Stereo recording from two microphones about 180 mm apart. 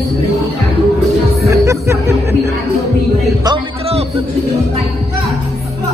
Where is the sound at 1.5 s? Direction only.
15° right (ahead or behind).